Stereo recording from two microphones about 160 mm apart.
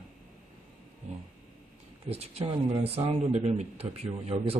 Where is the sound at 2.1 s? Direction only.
40° right (ahead or behind).